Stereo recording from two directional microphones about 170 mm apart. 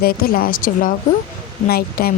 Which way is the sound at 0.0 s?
60° left (ahead or behind).